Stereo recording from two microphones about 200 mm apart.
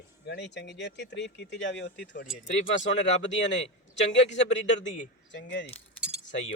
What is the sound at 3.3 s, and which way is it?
Speech, 65° left (ahead or behind).